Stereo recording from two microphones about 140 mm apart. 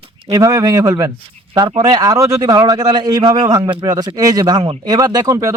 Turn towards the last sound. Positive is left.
turn(degrees=-25)  # may be behind; listen again after turning